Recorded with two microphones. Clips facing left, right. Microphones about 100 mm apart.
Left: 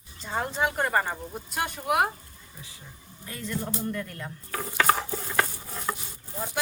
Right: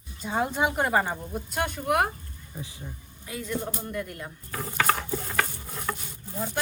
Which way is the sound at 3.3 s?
10° right (ahead or behind).